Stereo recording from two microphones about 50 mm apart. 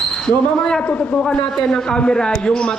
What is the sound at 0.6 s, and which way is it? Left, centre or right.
A man's voice, centre.